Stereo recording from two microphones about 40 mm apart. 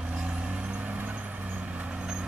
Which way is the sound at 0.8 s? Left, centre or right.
Right.